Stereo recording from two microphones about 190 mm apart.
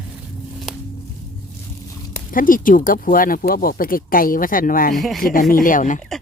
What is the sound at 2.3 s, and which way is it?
Speech, 45° left (ahead or behind).